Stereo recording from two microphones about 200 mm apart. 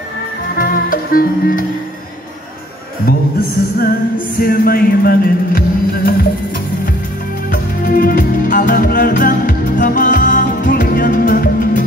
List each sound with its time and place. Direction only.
0.6 s music: 45° left (ahead or behind)
3.1 s music: 50° left (ahead or behind)
4.4 s speech: 45° left (ahead or behind)
7.5 s music: 45° left (ahead or behind)